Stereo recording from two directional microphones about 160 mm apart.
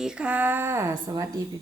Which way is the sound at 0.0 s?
5° right (ahead or behind).